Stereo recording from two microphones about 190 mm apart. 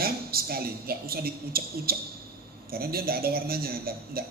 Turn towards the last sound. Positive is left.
turn(degrees=-50)  # may be behind; listen again after turning